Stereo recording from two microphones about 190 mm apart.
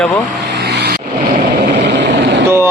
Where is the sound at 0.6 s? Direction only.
60° right (ahead or behind).